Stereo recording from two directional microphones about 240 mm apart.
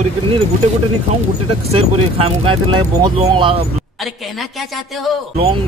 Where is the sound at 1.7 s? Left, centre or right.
Right.